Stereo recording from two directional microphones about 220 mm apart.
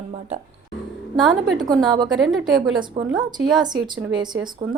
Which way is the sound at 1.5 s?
15° right (ahead or behind).